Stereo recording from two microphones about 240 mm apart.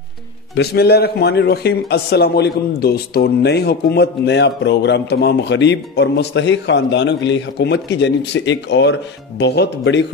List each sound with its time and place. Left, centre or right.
0.6 s a man's voice: left